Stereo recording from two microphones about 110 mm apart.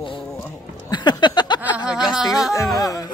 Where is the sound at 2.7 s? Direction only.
30° left (ahead or behind).